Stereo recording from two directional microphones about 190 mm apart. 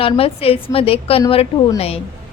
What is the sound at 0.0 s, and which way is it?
A woman's voice, 30° left (ahead or behind).